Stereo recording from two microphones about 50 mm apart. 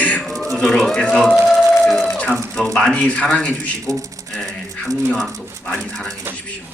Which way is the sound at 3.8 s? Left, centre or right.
Right.